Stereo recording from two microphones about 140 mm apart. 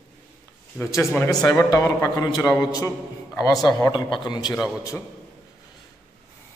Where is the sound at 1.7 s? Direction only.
20° left (ahead or behind).